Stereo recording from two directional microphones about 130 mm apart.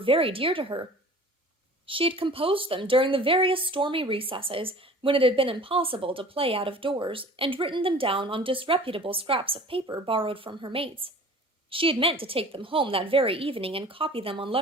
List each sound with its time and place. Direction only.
0.0 s a woman's voice: 45° right (ahead or behind)
1.9 s a woman's voice: 45° right (ahead or behind)